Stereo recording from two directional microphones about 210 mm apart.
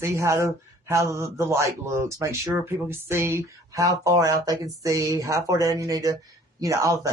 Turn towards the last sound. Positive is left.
turn(degrees=-15)  # may be behind; listen again after turning